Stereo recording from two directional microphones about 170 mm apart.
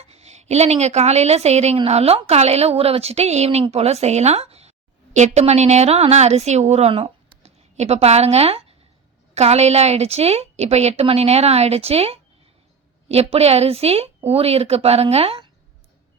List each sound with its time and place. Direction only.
0.0 s a woman's voice: 40° right (ahead or behind)